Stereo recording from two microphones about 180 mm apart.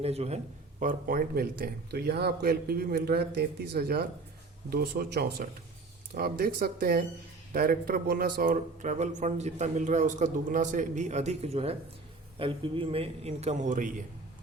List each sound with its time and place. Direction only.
0.0 s a man's voice: 35° right (ahead or behind)
0.8 s a man's voice: 50° right (ahead or behind)